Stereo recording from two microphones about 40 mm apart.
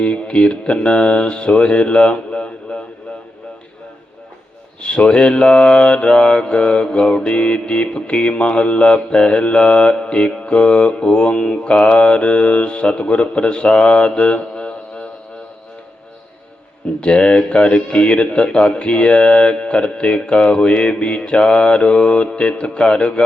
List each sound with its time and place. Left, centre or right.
0.0 s mantra: left
4.8 s mantra: left
17.0 s mantra: left